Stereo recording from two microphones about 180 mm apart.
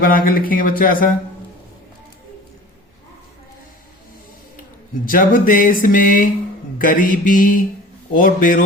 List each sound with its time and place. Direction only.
0.0 s music: 50° left (ahead or behind)
5.0 s music: 50° left (ahead or behind)